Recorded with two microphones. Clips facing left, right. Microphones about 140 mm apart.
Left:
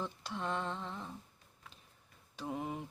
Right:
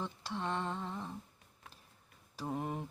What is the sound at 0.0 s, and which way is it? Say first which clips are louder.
Mantra: right 1 dB; centre (ahead or behind).